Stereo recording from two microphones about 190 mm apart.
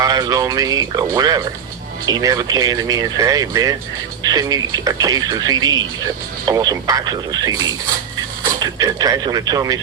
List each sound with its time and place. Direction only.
0.0 s speech: 20° right (ahead or behind)